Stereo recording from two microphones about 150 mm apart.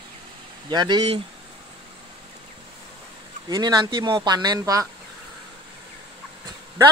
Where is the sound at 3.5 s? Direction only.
25° right (ahead or behind).